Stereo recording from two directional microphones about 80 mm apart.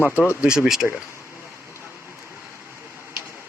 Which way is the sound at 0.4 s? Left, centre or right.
Centre.